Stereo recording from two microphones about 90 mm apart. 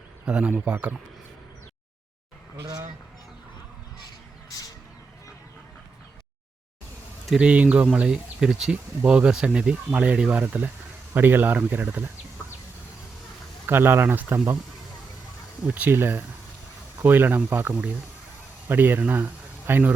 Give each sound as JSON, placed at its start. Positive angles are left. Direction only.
{"t": 0.3, "sound": "speech", "side_deg": -10}
{"t": 7.3, "sound": "speech", "side_deg": -10}
{"t": 13.7, "sound": "speech", "side_deg": -25}
{"t": 15.6, "sound": "speech", "side_deg": -20}